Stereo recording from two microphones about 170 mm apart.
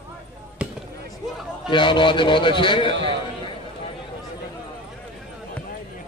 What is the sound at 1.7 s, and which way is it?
A man's voice, 30° left (ahead or behind).